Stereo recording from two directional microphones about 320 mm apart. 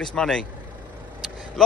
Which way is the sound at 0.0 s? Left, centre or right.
Centre.